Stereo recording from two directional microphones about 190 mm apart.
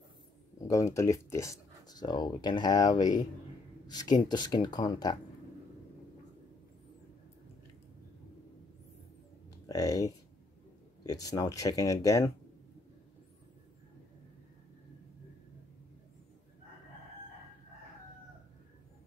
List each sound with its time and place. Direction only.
0.7 s speech: 15° left (ahead or behind)
9.7 s speech: 20° left (ahead or behind)